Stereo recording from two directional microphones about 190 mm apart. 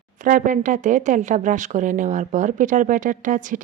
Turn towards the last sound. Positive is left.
turn(degrees=-45)  # may be behind; listen again after turning